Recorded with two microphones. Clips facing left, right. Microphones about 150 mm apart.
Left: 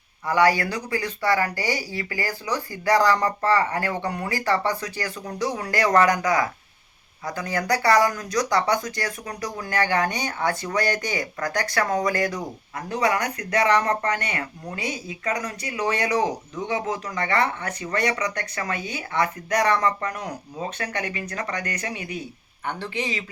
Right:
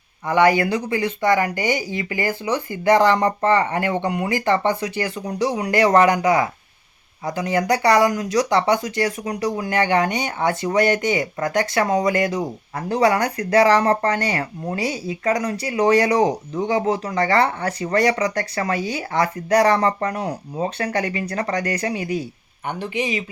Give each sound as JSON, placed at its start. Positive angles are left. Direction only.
{"t": 0.3, "sound": "speech", "side_deg": -20}
{"t": 22.6, "sound": "speech", "side_deg": -15}